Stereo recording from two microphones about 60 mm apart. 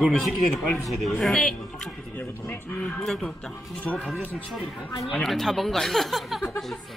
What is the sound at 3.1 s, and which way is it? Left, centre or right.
Speech, centre.